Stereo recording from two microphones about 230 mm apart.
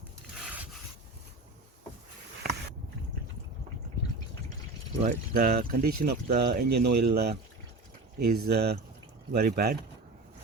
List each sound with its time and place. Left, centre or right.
0.4 s rub: centre
5.0 s speech: right